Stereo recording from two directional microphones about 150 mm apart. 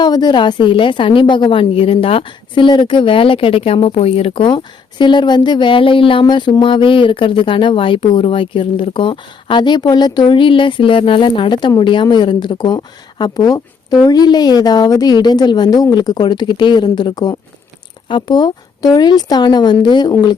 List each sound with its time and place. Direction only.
0.0 s a woman's voice: 30° left (ahead or behind)